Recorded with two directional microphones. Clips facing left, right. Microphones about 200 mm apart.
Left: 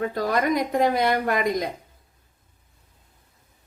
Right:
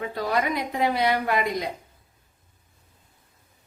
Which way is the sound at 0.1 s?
45° left (ahead or behind).